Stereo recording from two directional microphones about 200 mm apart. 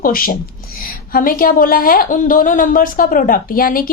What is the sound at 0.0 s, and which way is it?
A woman's voice, 45° left (ahead or behind).